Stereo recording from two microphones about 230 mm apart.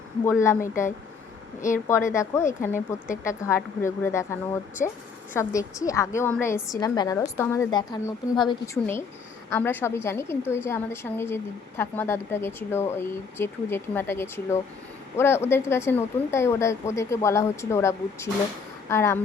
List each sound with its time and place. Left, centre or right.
0.3 s speech: centre
0.6 s speech: left
1.9 s speech: centre